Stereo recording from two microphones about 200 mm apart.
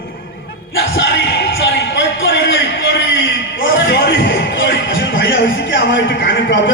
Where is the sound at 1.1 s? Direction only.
60° left (ahead or behind).